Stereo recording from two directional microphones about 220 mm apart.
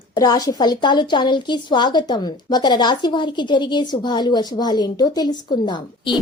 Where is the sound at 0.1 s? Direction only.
20° left (ahead or behind).